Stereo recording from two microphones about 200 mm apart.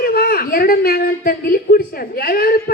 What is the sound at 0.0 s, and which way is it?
A woman's voice, 50° left (ahead or behind).